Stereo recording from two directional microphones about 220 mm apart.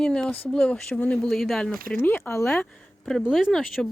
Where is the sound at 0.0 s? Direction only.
5° left (ahead or behind).